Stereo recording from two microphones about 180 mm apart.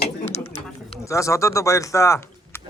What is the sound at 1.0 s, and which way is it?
Speech, 15° left (ahead or behind).